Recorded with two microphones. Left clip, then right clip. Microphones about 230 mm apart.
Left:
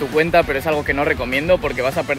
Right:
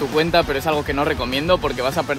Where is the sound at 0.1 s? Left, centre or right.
Centre.